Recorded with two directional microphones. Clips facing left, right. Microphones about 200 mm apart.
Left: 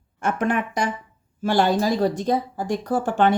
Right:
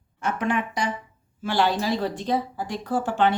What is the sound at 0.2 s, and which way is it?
Speech, 50° left (ahead or behind).